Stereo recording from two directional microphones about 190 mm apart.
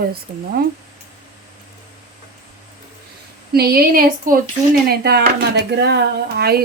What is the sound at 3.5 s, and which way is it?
Speech, 55° right (ahead or behind).